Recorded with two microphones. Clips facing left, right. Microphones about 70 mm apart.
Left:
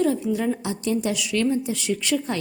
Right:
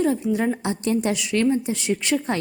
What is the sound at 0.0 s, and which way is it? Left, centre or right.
A woman's voice, right.